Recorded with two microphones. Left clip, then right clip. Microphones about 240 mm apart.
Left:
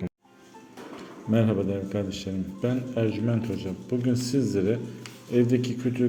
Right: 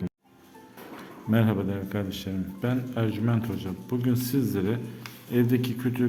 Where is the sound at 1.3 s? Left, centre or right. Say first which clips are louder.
Left 2 dB; centre.